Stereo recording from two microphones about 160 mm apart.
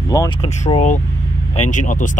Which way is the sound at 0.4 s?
35° left (ahead or behind).